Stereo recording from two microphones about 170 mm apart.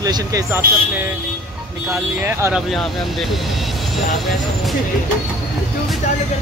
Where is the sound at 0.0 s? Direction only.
20° right (ahead or behind).